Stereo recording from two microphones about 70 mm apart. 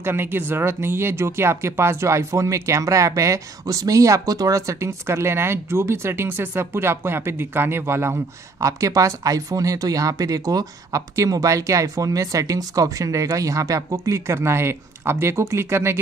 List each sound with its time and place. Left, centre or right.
0.0 s speech: right